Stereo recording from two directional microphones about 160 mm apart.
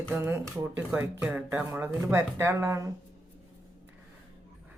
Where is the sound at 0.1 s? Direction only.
15° right (ahead or behind).